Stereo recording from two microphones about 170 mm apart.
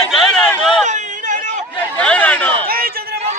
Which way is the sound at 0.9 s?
45° right (ahead or behind).